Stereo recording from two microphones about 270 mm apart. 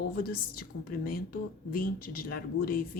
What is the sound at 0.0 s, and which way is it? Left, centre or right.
A woman's voice, left.